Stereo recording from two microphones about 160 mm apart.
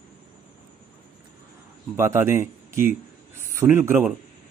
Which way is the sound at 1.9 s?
15° right (ahead or behind).